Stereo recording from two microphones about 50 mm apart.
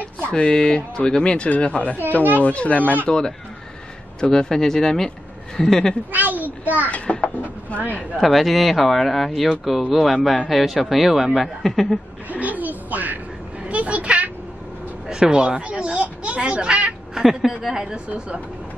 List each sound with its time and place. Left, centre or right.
0.2 s speech: centre
3.1 s speech: centre
6.1 s a sound: right
6.9 s a child's voice: left
8.2 s speech: centre
12.3 s a sound: right
15.0 s speech: centre
17.1 s a woman's voice: centre